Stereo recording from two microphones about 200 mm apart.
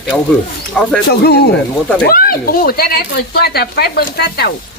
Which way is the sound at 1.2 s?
55° left (ahead or behind).